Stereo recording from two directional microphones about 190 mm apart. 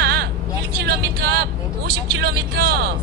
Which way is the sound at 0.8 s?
55° right (ahead or behind).